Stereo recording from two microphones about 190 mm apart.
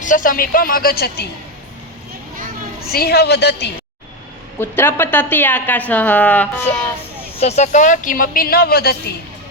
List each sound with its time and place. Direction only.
0.0 s a woman's voice: 45° left (ahead or behind)
2.9 s a woman's voice: 55° left (ahead or behind)
4.6 s a woman's voice: 10° left (ahead or behind)
7.3 s a woman's voice: 35° left (ahead or behind); by 9.0 s 55° left (ahead or behind)